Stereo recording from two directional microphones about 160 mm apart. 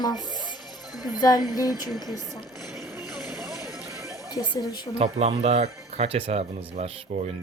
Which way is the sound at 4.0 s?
20° left (ahead or behind).